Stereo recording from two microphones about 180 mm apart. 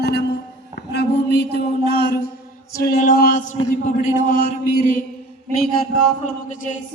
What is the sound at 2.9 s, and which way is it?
Music, 50° left (ahead or behind).